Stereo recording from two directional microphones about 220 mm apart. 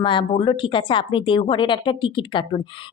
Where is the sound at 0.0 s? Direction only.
20° left (ahead or behind).